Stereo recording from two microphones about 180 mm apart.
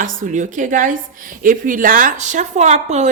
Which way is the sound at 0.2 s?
45° right (ahead or behind).